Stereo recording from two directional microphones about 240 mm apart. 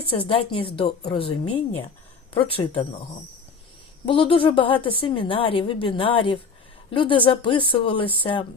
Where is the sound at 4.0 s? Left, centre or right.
Left.